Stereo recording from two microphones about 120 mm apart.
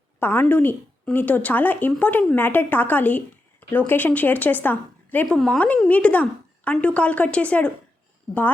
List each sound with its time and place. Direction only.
0.2 s a woman's voice: 15° left (ahead or behind)